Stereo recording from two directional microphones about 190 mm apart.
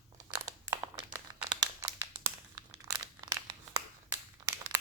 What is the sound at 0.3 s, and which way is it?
Crumpling, 15° right (ahead or behind).